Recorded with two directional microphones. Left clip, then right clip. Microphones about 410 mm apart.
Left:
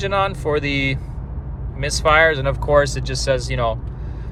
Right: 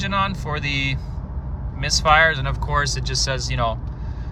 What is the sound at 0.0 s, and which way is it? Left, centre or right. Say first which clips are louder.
Speech: left 3 dB; centre.